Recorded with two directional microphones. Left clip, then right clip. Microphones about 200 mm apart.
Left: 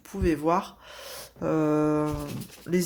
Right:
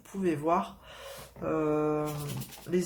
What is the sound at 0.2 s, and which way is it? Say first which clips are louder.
Speech: left 3 dB; 40° left (ahead or behind).